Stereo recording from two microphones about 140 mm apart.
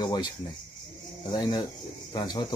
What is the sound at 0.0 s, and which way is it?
Speech, 30° left (ahead or behind).